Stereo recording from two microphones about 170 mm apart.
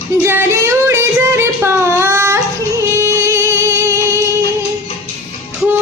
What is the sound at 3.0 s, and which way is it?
Music, 15° right (ahead or behind).